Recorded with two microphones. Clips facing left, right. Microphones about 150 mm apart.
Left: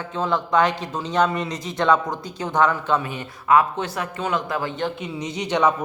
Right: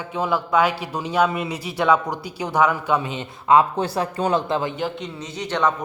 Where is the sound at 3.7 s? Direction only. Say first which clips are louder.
Right 4 dB; 35° right (ahead or behind).